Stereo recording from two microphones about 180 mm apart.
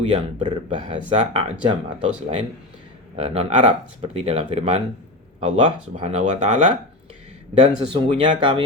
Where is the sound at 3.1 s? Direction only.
35° right (ahead or behind).